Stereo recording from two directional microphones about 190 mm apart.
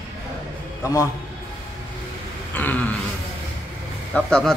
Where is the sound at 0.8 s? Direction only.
15° left (ahead or behind).